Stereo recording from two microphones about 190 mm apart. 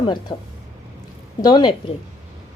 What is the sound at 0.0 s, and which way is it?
Speech, 25° left (ahead or behind).